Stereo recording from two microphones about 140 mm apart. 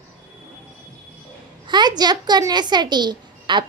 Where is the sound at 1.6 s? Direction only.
30° right (ahead or behind).